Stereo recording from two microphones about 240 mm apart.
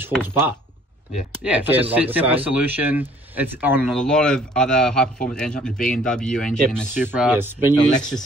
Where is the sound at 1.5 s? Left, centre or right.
Centre.